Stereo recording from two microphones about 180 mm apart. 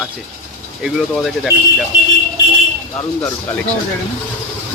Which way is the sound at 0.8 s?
Centre (ahead or behind).